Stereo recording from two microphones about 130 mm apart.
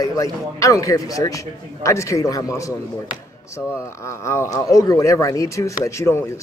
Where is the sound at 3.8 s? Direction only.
20° left (ahead or behind).